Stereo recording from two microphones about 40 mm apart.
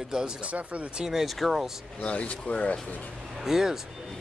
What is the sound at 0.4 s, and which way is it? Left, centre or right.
Speech, right.